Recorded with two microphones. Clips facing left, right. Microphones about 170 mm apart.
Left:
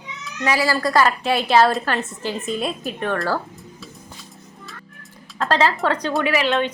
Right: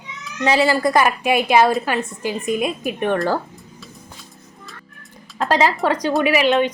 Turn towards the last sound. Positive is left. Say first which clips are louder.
# right 4 dB
turn(degrees=-15)  # may be behind; listen again after turning